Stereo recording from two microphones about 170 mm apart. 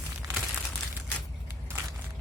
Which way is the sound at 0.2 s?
15° right (ahead or behind).